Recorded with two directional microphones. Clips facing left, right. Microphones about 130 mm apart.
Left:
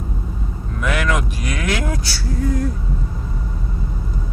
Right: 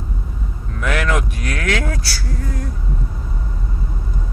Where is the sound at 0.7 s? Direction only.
5° left (ahead or behind).